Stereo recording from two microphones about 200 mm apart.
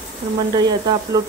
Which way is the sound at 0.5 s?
20° right (ahead or behind).